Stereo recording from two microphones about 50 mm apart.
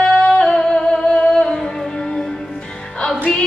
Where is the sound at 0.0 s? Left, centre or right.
Centre.